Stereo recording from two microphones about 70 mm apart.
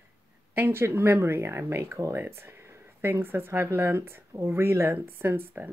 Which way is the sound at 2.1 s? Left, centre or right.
Right.